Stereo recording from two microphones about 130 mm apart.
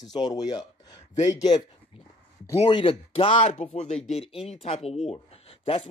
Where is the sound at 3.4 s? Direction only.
60° left (ahead or behind).